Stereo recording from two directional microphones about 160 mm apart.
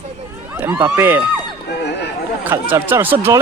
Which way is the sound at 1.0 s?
15° right (ahead or behind).